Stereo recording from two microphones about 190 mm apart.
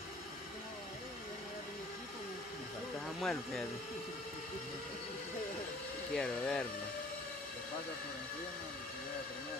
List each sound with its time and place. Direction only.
3.2 s speech: 5° left (ahead or behind)
6.1 s speech: 5° left (ahead or behind)